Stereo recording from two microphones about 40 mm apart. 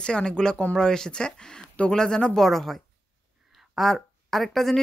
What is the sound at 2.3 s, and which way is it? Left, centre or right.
Speech, centre.